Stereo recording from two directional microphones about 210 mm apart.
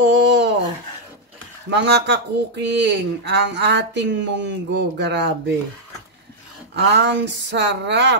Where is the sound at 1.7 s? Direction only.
55° right (ahead or behind).